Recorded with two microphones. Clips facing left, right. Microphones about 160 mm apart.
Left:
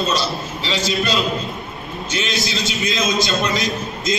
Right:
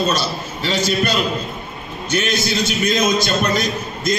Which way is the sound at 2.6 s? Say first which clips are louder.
Right 5 dB; 45° right (ahead or behind).